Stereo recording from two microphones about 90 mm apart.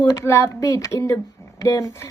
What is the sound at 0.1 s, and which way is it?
Speech, 35° left (ahead or behind).